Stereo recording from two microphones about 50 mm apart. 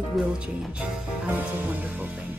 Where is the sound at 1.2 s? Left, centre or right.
Right.